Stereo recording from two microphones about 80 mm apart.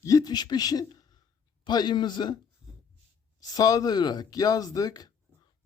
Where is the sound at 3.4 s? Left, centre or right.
Left.